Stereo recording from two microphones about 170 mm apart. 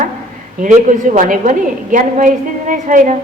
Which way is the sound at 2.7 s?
50° right (ahead or behind).